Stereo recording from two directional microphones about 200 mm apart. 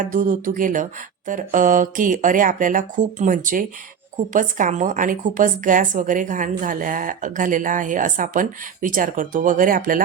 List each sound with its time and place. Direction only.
0.0 s a woman's voice: 40° right (ahead or behind)